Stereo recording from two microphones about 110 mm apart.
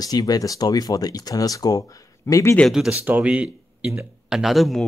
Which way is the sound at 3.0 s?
15° right (ahead or behind).